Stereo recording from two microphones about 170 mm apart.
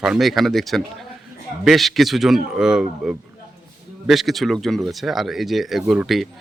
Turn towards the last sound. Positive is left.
turn(degrees=0)  # may be behind; listen again after turning